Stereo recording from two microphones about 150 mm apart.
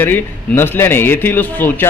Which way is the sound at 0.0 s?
15° left (ahead or behind).